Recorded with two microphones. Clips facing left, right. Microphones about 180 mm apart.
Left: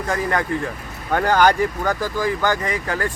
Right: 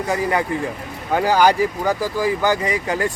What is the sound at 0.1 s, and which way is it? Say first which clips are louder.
Speech: right 1 dB; 10° right (ahead or behind).